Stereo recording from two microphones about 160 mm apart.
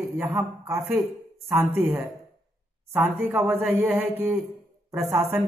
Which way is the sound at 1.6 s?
Centre (ahead or behind).